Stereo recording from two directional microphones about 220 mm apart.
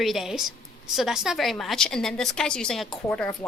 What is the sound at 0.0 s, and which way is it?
A woman's voice, centre (ahead or behind).